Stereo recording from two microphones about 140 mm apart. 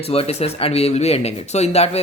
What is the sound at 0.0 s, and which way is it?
Speech, 45° left (ahead or behind).